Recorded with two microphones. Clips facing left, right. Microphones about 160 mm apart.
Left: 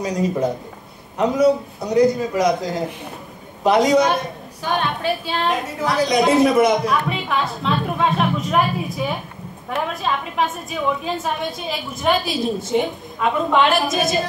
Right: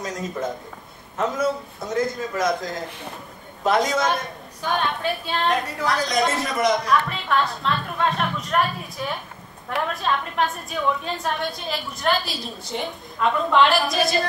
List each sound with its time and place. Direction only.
0.0 s a woman's voice: centre (ahead or behind)
1.1 s speech: 20° left (ahead or behind)
4.0 s a woman's voice: centre (ahead or behind)